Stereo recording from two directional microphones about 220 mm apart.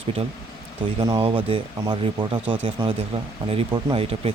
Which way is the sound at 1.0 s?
25° right (ahead or behind).